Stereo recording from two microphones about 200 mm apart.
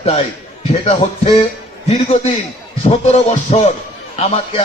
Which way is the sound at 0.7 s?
30° left (ahead or behind).